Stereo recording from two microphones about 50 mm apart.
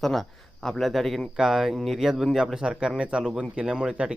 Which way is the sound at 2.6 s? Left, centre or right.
Centre.